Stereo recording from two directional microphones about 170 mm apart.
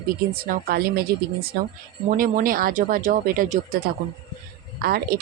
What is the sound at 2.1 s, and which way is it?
A woman's voice, 55° right (ahead or behind).